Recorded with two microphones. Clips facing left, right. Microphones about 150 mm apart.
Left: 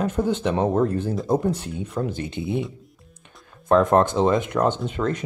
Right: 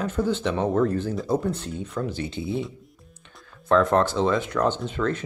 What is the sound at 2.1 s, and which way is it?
Speech, 50° left (ahead or behind).